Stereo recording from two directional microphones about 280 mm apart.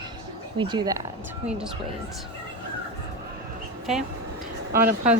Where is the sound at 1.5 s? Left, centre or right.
Centre.